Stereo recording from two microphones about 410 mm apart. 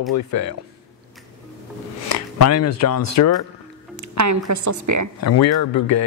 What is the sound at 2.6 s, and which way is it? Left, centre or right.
Speech, left.